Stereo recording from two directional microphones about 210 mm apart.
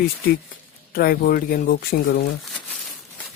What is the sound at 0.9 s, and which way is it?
Speech, 45° left (ahead or behind).